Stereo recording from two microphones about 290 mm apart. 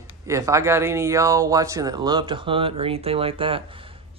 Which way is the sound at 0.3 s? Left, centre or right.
Centre.